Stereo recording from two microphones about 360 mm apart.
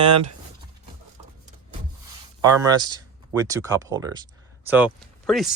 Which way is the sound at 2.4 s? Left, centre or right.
Centre.